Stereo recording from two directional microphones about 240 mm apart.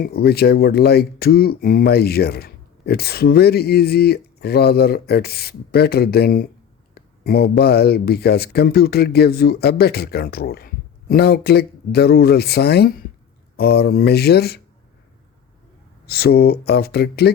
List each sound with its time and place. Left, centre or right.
0.0 s speech: left
16.0 s speech: left